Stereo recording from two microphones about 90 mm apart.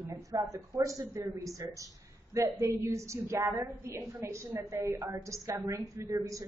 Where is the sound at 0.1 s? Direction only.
40° right (ahead or behind).